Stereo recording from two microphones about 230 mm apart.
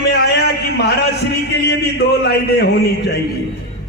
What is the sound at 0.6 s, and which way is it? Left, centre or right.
A man's voice, left.